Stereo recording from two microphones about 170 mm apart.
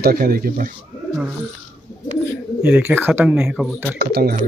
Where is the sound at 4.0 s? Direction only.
65° right (ahead or behind).